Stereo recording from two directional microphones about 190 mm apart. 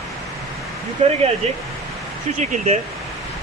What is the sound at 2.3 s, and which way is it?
Speech, 40° right (ahead or behind).